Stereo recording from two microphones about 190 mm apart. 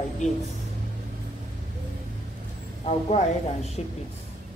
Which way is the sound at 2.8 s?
35° left (ahead or behind).